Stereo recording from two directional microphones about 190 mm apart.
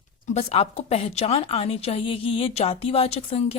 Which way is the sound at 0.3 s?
35° left (ahead or behind).